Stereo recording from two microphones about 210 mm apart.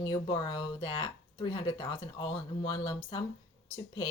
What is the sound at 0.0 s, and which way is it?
Speech, 20° left (ahead or behind).